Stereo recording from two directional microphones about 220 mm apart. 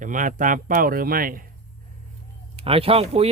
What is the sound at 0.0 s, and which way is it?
Speech, 35° right (ahead or behind).